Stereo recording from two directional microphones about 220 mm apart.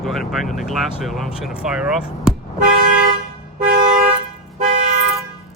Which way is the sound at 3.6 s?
40° right (ahead or behind).